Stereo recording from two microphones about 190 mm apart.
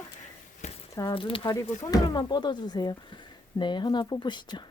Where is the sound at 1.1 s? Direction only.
30° left (ahead or behind).